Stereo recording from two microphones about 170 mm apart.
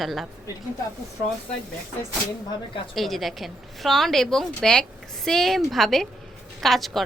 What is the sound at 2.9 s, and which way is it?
A woman's voice, centre (ahead or behind).